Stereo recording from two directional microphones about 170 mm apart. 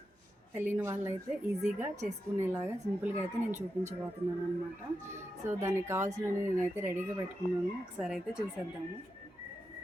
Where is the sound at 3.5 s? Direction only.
45° right (ahead or behind).